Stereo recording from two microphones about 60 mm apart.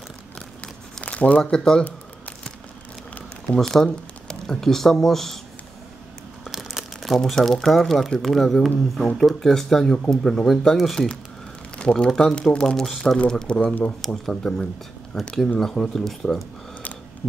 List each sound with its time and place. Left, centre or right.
1.0 s a sound: left
1.4 s speech: centre
3.5 s speech: centre
6.5 s speech: centre
11.8 s speech: centre